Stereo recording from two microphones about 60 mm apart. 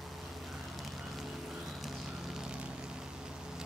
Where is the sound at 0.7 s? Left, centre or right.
Centre.